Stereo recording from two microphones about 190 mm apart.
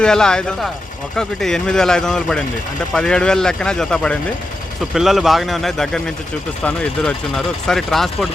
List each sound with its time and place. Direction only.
0.0 s speech: 5° left (ahead or behind)